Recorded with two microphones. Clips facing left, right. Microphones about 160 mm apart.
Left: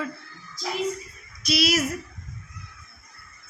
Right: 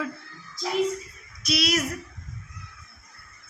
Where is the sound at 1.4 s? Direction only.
Centre (ahead or behind).